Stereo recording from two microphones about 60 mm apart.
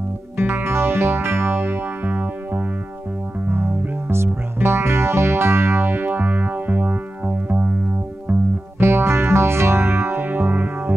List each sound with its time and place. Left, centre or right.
0.4 s music: right
8.7 s music: right